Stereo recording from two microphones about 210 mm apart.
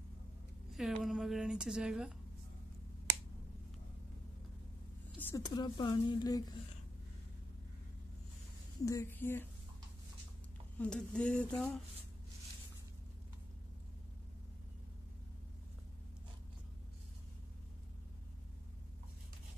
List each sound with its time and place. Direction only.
0.7 s speech: centre (ahead or behind)
5.2 s speech: 15° left (ahead or behind)
8.8 s a woman's voice: 15° left (ahead or behind)
10.8 s speech: 5° left (ahead or behind)